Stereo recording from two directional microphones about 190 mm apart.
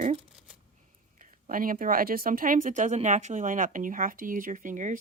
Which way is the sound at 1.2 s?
45° right (ahead or behind).